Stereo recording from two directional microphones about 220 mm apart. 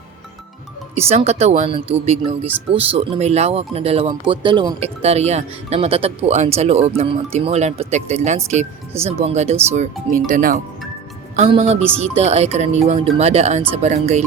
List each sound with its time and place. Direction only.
0.9 s speech: 30° right (ahead or behind)